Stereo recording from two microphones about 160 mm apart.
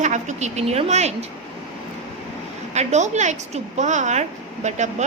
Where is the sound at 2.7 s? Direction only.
45° right (ahead or behind).